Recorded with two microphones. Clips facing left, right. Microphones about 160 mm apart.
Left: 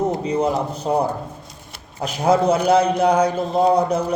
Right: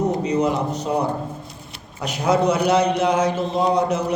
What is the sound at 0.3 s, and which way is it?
Speech, 30° left (ahead or behind).